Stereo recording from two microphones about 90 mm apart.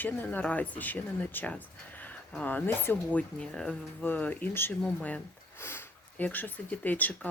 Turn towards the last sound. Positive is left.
turn(degrees=20)  # may be behind; listen again after turning